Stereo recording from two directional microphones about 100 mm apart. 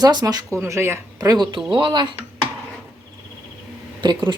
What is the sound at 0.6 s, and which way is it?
Speech, 25° right (ahead or behind).